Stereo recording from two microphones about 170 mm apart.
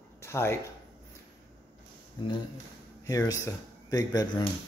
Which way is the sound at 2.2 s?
30° left (ahead or behind).